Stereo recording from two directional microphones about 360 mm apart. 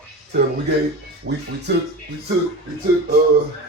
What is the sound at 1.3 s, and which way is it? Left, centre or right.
Speech, right.